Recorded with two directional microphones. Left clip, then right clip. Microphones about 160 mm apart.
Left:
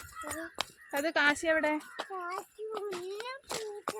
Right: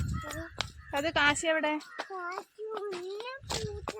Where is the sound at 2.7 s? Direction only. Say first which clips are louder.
Right 1 dB; centre (ahead or behind).